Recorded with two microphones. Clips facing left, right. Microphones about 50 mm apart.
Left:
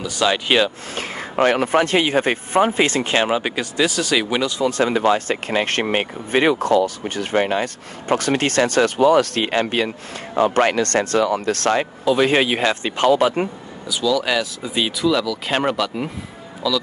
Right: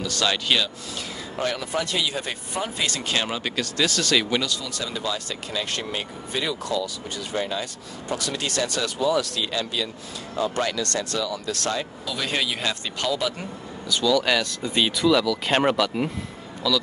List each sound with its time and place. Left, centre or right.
0.0 s speech: centre
0.5 s speech: left
1.3 s speech: left
4.8 s speech: left
7.3 s speech: left
12.0 s speech: left
13.1 s speech: left
13.8 s speech: centre